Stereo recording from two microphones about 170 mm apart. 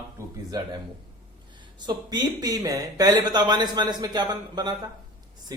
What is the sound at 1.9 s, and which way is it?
A man's voice, 25° right (ahead or behind).